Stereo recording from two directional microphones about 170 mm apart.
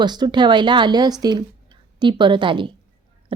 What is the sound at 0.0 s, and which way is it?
A woman's voice, 25° right (ahead or behind).